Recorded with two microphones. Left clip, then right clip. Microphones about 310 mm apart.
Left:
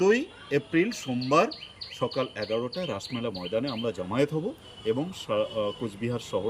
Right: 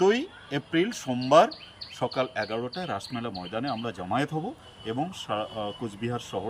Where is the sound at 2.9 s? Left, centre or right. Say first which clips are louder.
Even; centre.